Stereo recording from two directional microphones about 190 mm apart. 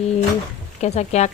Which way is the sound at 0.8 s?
35° left (ahead or behind).